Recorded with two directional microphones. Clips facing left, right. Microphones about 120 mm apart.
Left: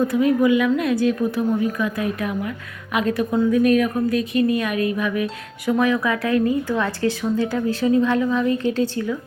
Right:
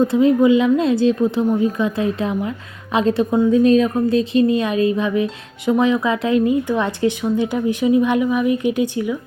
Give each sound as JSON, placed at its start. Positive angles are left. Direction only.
{"t": 0.0, "sound": "a woman's voice", "side_deg": -25}